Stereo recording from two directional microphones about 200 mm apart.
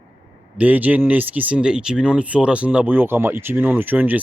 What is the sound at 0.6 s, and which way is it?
Speech, 10° right (ahead or behind).